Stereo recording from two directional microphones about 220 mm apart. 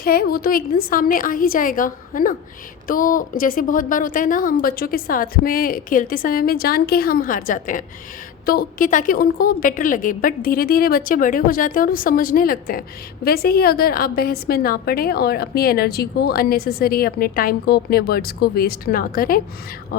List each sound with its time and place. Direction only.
0.0 s a woman's voice: 40° left (ahead or behind)